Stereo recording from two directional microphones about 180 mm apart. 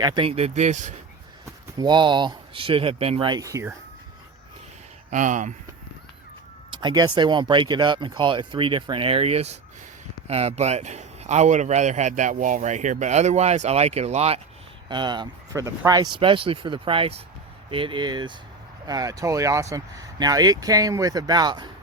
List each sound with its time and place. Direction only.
0.0 s speech: 25° right (ahead or behind); by 0.9 s 40° right (ahead or behind)
1.8 s speech: 25° right (ahead or behind)
5.1 s speech: 45° right (ahead or behind)
6.7 s speech: 25° right (ahead or behind)
14.8 s speech: 25° right (ahead or behind)